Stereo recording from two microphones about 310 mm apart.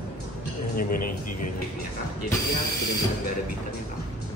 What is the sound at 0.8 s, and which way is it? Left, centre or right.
Speech, left.